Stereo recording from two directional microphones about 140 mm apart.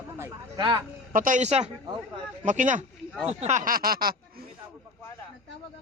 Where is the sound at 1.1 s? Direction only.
70° right (ahead or behind).